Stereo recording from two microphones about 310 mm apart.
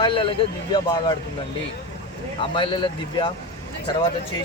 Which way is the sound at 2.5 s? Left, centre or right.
Centre.